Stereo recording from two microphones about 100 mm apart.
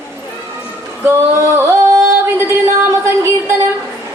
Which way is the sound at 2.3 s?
25° right (ahead or behind).